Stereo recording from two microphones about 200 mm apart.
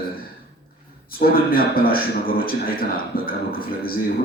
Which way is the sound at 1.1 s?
45° left (ahead or behind).